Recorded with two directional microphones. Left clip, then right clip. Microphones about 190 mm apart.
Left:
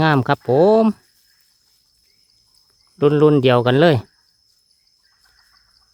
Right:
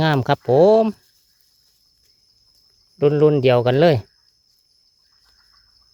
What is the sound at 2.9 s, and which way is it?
Speech, 10° left (ahead or behind).